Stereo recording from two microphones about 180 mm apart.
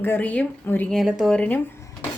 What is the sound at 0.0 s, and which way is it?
Speech, 10° left (ahead or behind).